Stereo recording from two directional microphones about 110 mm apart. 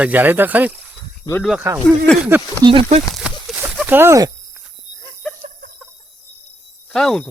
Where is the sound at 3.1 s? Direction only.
5° right (ahead or behind).